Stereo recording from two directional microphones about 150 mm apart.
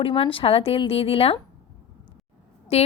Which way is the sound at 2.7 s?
40° left (ahead or behind).